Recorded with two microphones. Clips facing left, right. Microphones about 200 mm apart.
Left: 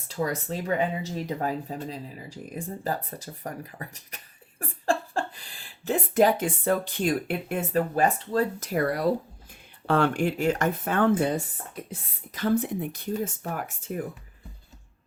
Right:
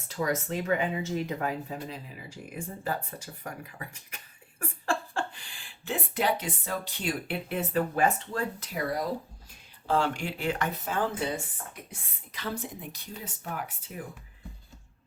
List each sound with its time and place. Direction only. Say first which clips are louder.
0.2 s speech: left 1 dB; 35° left (ahead or behind)
8.7 s speech: left 7 dB; 65° left (ahead or behind); by 10.8 s 45° left (ahead or behind)
10.8 s speech: left 9 dB; 60° left (ahead or behind)